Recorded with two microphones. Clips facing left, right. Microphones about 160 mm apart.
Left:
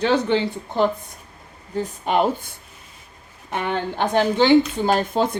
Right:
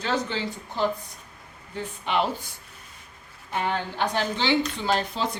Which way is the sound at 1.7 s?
45° left (ahead or behind).